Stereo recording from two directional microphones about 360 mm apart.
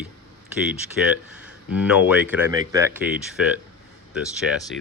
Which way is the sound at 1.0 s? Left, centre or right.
Centre.